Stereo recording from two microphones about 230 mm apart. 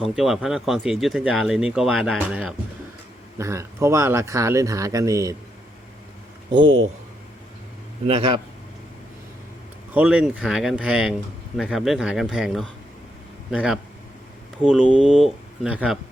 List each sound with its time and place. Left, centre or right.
0.0 s speech: centre
8.0 s speech: right
9.9 s speech: centre